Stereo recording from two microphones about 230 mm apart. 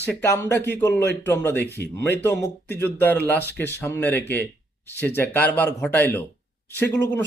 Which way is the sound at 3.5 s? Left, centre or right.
Centre.